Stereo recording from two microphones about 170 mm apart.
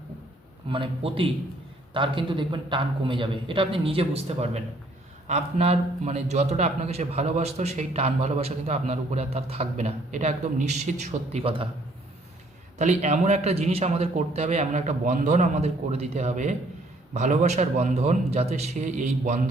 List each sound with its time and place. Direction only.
0.7 s a man's voice: 30° right (ahead or behind)
12.8 s a man's voice: 45° right (ahead or behind)